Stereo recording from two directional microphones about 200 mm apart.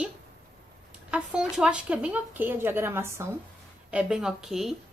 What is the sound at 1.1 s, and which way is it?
A woman's voice, 5° right (ahead or behind).